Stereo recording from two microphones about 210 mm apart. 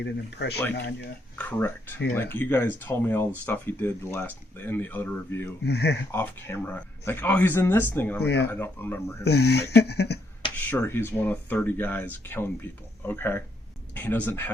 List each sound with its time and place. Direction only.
0.0 s speech: 55° left (ahead or behind)
1.4 s speech: 10° left (ahead or behind)
5.6 s speech: 55° left (ahead or behind)
6.1 s speech: 10° left (ahead or behind)
9.2 s speech: 50° left (ahead or behind)
10.5 s speech: 10° left (ahead or behind)